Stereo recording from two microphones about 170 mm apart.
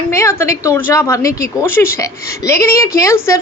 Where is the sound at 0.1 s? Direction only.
15° left (ahead or behind).